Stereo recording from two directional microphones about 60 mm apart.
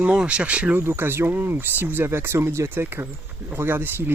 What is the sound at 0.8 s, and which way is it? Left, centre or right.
Speech, right.